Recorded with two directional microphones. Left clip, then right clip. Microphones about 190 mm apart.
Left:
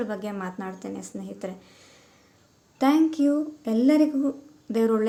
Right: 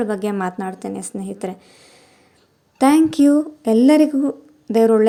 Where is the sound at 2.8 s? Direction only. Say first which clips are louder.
Right 7 dB; 45° right (ahead or behind).